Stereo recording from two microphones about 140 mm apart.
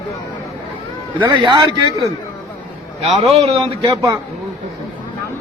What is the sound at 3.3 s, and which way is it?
Speech, 45° right (ahead or behind).